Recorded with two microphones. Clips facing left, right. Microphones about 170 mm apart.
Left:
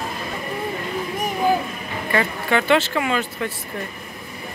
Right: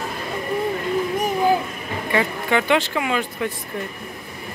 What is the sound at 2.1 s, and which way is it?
Speech, 15° right (ahead or behind).